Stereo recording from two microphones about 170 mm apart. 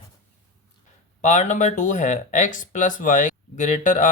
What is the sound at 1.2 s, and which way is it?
Speech, 45° left (ahead or behind).